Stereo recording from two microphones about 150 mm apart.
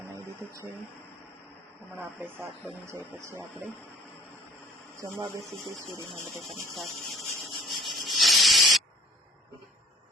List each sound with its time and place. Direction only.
3.2 s speech: 15° right (ahead or behind)
5.4 s speech: centre (ahead or behind)
6.1 s rub: centre (ahead or behind)